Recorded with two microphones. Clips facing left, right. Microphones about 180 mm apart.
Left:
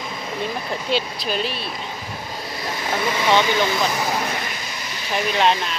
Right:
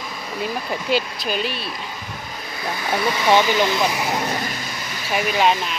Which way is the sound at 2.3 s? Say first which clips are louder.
Right 1 dB; 30° left (ahead or behind).